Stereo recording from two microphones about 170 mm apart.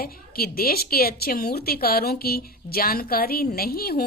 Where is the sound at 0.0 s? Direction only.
60° left (ahead or behind).